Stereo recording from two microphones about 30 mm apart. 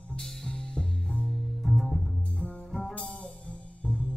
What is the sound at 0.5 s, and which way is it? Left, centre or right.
Music, left.